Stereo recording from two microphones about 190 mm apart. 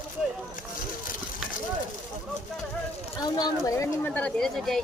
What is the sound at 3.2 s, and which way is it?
Speech, 20° left (ahead or behind).